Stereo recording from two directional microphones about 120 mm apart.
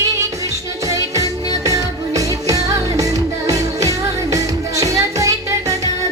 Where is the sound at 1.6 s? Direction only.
25° right (ahead or behind).